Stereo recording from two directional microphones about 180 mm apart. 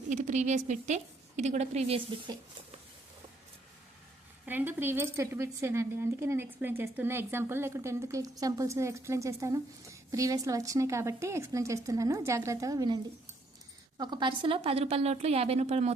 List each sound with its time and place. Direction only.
0.1 s a woman's voice: 40° right (ahead or behind)
4.4 s speech: 10° right (ahead or behind)
14.0 s a woman's voice: 25° right (ahead or behind)